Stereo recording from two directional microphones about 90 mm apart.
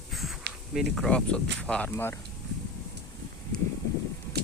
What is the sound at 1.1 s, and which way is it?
Speech, 10° left (ahead or behind).